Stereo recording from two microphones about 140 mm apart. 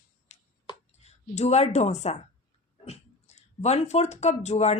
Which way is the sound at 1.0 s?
50° left (ahead or behind).